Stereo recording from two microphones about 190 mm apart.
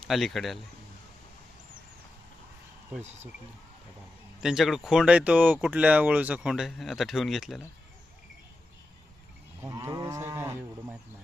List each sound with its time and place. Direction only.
0.1 s speech: centre (ahead or behind)
4.4 s speech: centre (ahead or behind)
9.6 s livestock: 15° right (ahead or behind)